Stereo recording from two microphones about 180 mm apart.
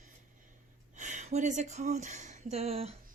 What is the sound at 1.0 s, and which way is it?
Speech, 40° right (ahead or behind).